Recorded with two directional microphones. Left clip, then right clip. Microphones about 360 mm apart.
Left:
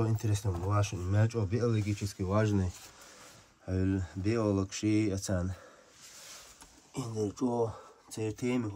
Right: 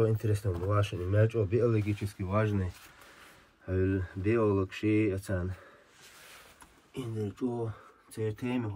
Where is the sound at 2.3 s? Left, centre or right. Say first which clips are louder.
Even; centre.